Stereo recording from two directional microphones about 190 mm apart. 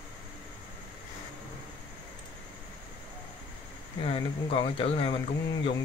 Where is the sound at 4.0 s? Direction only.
30° left (ahead or behind).